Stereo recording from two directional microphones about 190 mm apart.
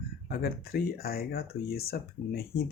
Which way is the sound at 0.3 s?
55° left (ahead or behind).